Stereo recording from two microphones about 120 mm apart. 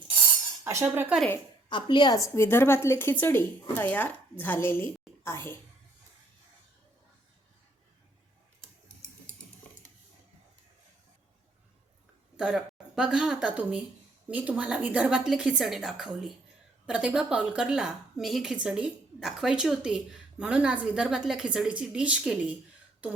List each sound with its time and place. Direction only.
0.6 s cutlery: 20° right (ahead or behind)
1.7 s a woman's voice: 40° left (ahead or behind)
2.3 s speech: 20° left (ahead or behind)
12.4 s a woman's voice: 5° right (ahead or behind)